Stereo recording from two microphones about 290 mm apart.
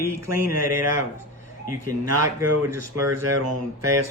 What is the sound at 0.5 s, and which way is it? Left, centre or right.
Speech, right.